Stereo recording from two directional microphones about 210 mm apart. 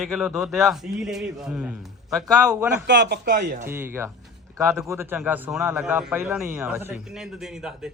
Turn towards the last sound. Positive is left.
turn(degrees=-5)  # may be behind; listen again after turning